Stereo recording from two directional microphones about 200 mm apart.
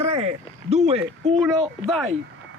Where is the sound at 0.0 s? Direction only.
35° right (ahead or behind).